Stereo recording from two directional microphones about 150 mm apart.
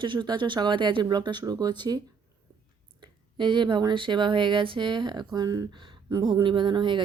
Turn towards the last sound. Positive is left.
turn(degrees=-30)  # may be behind; listen again after turning